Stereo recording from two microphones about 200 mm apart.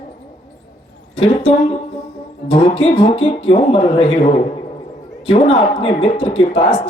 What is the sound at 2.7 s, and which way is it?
Speech, 30° left (ahead or behind).